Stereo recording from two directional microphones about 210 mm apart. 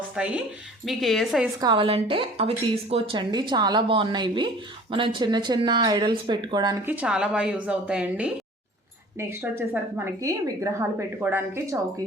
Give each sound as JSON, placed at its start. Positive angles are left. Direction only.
{"t": 0.2, "sound": "a woman's voice", "side_deg": -5}
{"t": 1.6, "sound": "a woman's voice", "side_deg": -25}
{"t": 6.8, "sound": "a woman's voice", "side_deg": -5}